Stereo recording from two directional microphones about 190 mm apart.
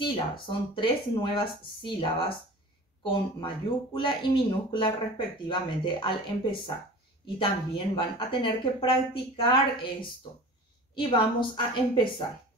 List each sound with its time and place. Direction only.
0.0 s speech: 25° left (ahead or behind)
11.0 s speech: 25° left (ahead or behind)